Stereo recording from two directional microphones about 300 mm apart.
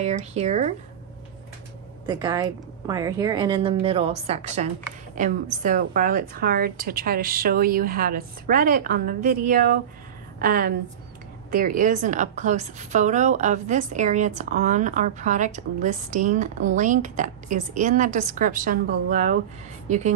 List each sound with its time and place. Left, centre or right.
0.0 s a woman's voice: right
2.0 s a woman's voice: centre